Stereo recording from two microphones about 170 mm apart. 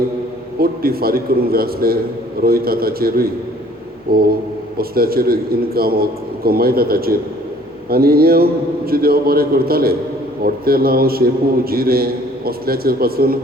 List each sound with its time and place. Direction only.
0.6 s a man's voice: 60° right (ahead or behind)